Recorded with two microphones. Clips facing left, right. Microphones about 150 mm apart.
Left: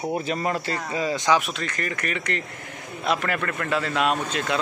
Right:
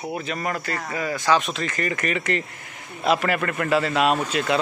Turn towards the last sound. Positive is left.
turn(degrees=-5)  # may be behind; listen again after turning